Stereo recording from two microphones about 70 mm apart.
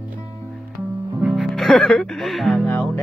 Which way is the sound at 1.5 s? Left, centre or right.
Centre.